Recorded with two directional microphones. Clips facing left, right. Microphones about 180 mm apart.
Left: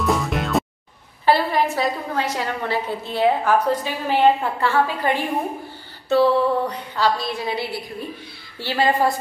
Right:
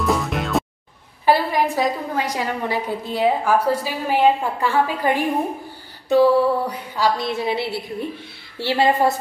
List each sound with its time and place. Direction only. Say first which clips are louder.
0.0 s music: even; centre (ahead or behind)
1.2 s a woman's voice: right 1 dB; 15° right (ahead or behind)
7.2 s a woman's voice: right 3 dB; 25° right (ahead or behind)